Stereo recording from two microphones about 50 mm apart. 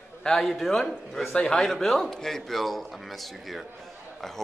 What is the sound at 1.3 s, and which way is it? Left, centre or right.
Speech, centre.